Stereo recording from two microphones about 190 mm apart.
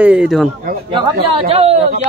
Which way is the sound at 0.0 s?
5° right (ahead or behind).